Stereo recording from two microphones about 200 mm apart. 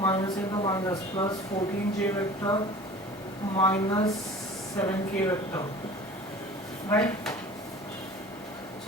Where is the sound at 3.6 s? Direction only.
10° left (ahead or behind).